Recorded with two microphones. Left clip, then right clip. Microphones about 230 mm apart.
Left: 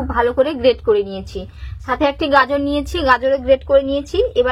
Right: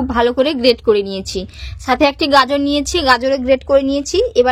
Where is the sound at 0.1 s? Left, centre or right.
Right.